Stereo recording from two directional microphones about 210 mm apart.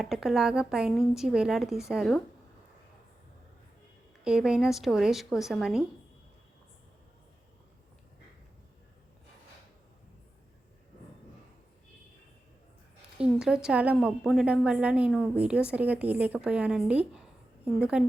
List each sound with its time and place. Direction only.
0.0 s a woman's voice: centre (ahead or behind)
4.2 s a woman's voice: 5° right (ahead or behind)
13.1 s a woman's voice: 5° right (ahead or behind)